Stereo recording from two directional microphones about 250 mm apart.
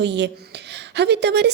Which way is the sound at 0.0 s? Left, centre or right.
Right.